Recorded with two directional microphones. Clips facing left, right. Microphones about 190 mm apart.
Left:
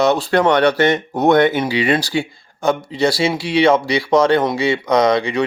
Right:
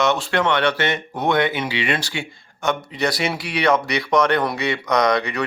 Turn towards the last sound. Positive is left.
turn(degrees=25)  # may be behind; listen again after turning